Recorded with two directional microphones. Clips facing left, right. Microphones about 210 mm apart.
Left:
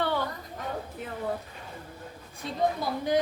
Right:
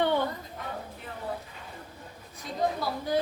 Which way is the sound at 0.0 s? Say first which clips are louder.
Right 3 dB; 20° right (ahead or behind).